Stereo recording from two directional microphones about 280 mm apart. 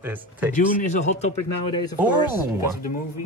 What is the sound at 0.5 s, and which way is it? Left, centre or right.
Speech, left.